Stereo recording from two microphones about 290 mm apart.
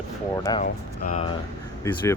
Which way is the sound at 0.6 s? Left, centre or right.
Left.